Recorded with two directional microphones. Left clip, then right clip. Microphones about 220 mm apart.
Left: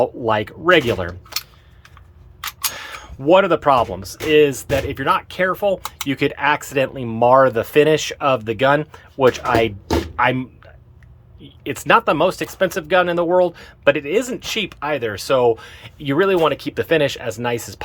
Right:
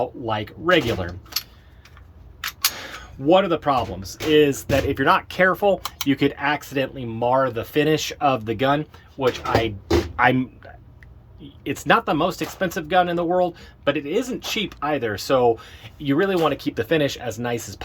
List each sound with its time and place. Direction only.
0.0 s speech: 15° left (ahead or behind)
1.3 s keys jangling: 10° left (ahead or behind)
2.7 s speech: 10° left (ahead or behind)
9.2 s speech: 25° left (ahead or behind)
10.2 s speech: centre (ahead or behind)
11.6 s speech: 10° left (ahead or behind)